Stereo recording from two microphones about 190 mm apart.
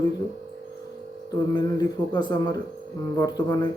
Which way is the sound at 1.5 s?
20° left (ahead or behind).